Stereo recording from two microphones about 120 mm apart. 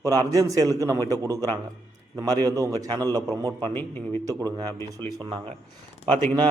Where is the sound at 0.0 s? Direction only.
30° right (ahead or behind).